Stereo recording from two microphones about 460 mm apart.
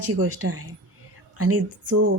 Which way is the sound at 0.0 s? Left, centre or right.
Right.